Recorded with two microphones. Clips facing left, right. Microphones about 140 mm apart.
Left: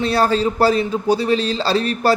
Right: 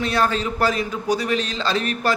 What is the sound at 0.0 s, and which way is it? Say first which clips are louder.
A man's voice: left 5 dB; 35° left (ahead or behind).